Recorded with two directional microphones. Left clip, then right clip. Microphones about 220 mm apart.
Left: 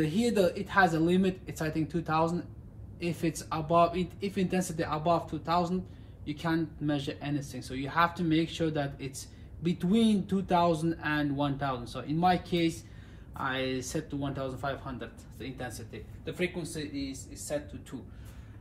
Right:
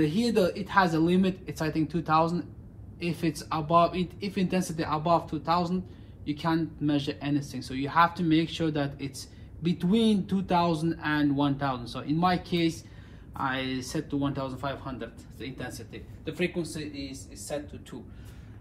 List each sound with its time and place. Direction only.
0.0 s speech: 15° right (ahead or behind)